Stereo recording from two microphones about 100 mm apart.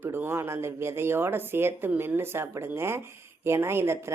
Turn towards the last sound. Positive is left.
turn(degrees=-25)  # may be behind; listen again after turning